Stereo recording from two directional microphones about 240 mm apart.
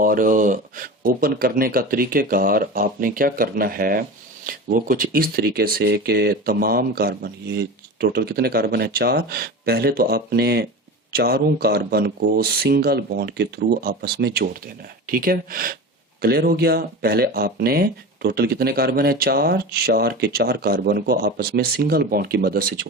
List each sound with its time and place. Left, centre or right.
0.0 s speech: right